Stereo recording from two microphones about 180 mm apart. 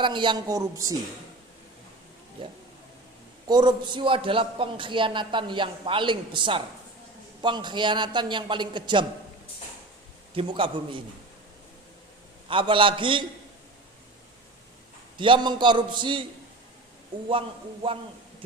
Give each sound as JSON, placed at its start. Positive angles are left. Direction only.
{"t": 0.0, "sound": "a man's voice", "side_deg": -25}
{"t": 3.4, "sound": "a man's voice", "side_deg": -25}
{"t": 10.3, "sound": "a man's voice", "side_deg": -30}
{"t": 12.5, "sound": "a man's voice", "side_deg": -30}
{"t": 15.2, "sound": "a man's voice", "side_deg": -25}